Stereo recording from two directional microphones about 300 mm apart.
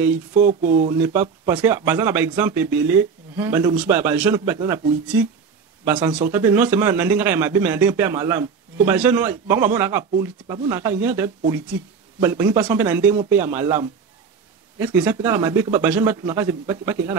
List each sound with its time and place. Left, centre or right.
0.3 s speech: right
0.8 s speech: centre